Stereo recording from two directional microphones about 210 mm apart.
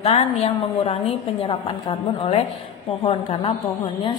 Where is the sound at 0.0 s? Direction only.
30° left (ahead or behind).